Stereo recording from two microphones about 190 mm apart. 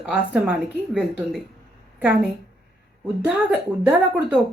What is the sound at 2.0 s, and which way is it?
Speech, 5° right (ahead or behind).